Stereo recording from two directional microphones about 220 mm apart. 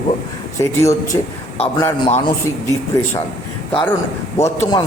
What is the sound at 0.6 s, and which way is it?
Speech, 15° left (ahead or behind).